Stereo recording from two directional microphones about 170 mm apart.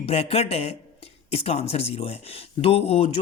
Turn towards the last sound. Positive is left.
turn(degrees=35)  # may be behind; listen again after turning